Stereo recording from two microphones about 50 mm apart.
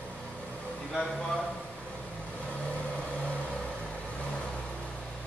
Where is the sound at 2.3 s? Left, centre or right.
Left.